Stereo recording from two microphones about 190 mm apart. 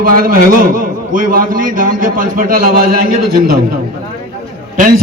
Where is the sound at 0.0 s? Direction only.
50° right (ahead or behind).